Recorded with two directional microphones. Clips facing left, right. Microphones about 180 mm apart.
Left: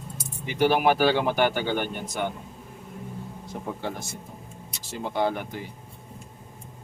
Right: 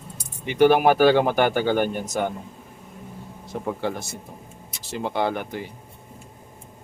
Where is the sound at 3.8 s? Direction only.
70° right (ahead or behind).